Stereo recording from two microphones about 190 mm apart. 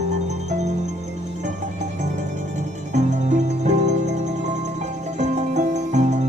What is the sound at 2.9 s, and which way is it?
Music, 40° right (ahead or behind).